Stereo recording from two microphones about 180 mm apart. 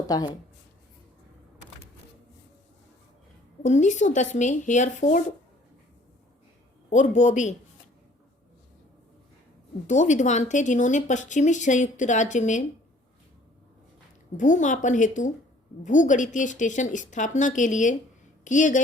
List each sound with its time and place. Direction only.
0.1 s speech: 20° left (ahead or behind)
3.6 s speech: 40° left (ahead or behind)
6.9 s speech: 40° left (ahead or behind)
9.8 s a woman's voice: 40° left (ahead or behind)
14.3 s a woman's voice: 45° left (ahead or behind)